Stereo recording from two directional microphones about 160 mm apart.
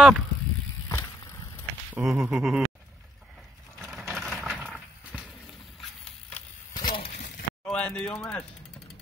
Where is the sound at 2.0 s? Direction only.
5° right (ahead or behind).